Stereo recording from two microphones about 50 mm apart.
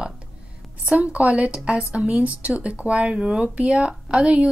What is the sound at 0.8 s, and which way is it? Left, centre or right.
A woman's voice, right.